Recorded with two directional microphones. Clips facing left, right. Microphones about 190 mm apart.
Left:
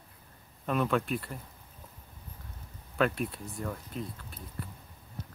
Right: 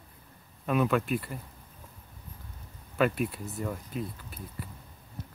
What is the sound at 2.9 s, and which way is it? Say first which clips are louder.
Speech: right 2 dB; 5° right (ahead or behind).